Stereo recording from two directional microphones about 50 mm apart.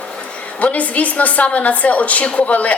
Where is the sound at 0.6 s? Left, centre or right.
Left.